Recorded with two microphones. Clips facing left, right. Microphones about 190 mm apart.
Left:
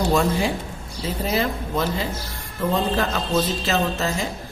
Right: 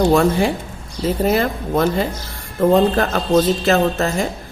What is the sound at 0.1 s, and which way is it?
A woman's voice, 55° right (ahead or behind).